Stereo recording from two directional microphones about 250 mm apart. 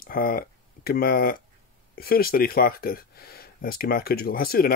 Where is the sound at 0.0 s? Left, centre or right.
Left.